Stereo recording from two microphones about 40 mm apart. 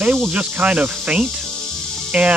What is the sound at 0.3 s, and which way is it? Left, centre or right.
Speech, right.